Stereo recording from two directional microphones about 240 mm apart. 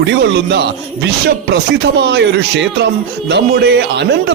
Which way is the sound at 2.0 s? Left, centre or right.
Right.